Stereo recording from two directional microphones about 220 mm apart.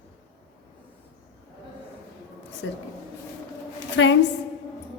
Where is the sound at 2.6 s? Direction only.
60° left (ahead or behind).